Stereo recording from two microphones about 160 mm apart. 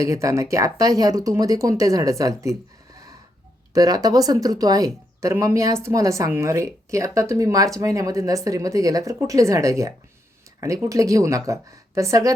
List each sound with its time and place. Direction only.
0.0 s speech: 20° right (ahead or behind)
3.7 s speech: 20° right (ahead or behind)